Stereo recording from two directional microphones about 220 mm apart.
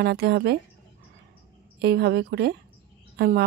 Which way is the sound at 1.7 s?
50° right (ahead or behind).